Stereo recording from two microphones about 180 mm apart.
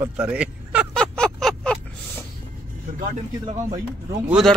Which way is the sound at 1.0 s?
5° left (ahead or behind).